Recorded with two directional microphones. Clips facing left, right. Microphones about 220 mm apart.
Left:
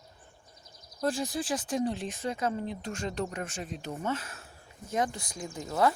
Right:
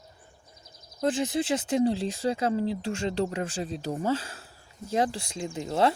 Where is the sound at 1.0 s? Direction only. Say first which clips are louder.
Right 4 dB; 20° right (ahead or behind).